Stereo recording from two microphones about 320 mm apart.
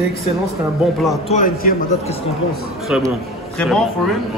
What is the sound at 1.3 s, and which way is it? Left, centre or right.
Speech, left.